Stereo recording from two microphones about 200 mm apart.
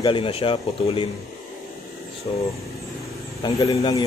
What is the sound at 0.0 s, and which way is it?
Speech, 25° left (ahead or behind).